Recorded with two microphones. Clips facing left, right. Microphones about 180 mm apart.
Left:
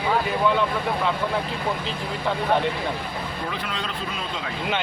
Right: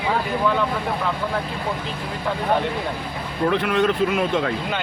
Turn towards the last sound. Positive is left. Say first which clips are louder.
# right 11 dB
turn(degrees=-60)  # may be behind; listen again after turning